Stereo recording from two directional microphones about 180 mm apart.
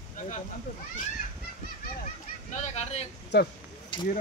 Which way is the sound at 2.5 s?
40° left (ahead or behind).